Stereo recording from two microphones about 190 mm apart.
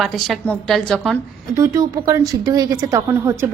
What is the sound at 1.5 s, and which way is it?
A woman's voice, 15° right (ahead or behind).